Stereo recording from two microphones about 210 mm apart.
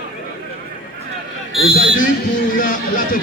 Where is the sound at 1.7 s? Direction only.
45° left (ahead or behind).